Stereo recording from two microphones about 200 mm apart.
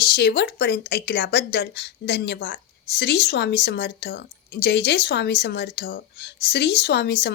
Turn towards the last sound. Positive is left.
turn(degrees=55)  # may be behind; listen again after turning